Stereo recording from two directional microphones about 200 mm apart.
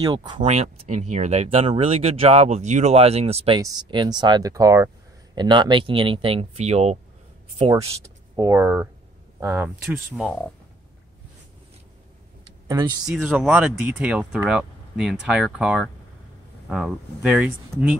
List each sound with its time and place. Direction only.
0.0 s speech: 20° right (ahead or behind)
0.4 s speech: 35° right (ahead or behind)
8.4 s speech: 15° right (ahead or behind)
12.6 s speech: 15° right (ahead or behind)
13.1 s speech: 5° right (ahead or behind)